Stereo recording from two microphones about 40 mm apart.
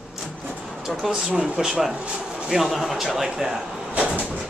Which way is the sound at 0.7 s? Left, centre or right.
Centre.